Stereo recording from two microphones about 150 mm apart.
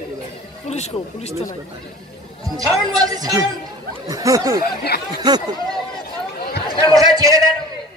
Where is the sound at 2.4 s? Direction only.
25° right (ahead or behind).